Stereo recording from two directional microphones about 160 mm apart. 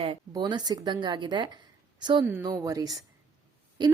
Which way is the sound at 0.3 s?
25° right (ahead or behind).